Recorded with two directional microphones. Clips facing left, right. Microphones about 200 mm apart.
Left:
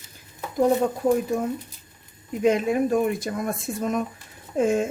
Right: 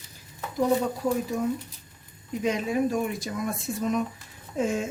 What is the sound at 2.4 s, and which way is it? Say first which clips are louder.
Speech: left 5 dB; 55° left (ahead or behind).